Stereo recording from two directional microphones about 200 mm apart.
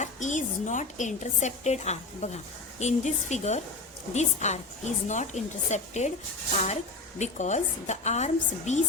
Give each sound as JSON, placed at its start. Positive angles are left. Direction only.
{"t": 0.0, "sound": "a woman's voice", "side_deg": 40}
{"t": 7.2, "sound": "a woman's voice", "side_deg": 35}